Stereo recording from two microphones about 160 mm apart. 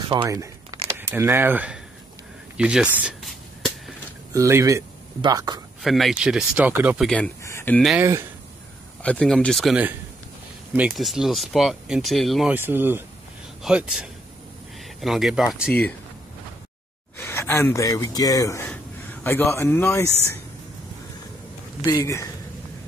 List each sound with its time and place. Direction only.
0.2 s speech: 20° right (ahead or behind)
2.5 s a sound: 5° right (ahead or behind)
4.3 s speech: 20° right (ahead or behind)
5.8 s speech: centre (ahead or behind)
7.4 s a sound: 15° left (ahead or behind)
8.0 s speech: 15° right (ahead or behind)
9.0 s speech: 5° left (ahead or behind)
12.5 s speech: 15° right (ahead or behind)
17.2 s speech: 15° left (ahead or behind)
21.8 s speech: 20° left (ahead or behind)